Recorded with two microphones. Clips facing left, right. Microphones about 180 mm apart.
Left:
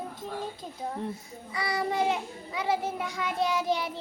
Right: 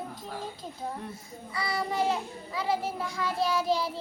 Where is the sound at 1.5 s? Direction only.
20° left (ahead or behind).